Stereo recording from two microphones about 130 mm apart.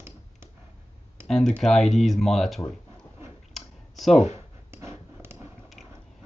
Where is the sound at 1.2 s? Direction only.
5° left (ahead or behind).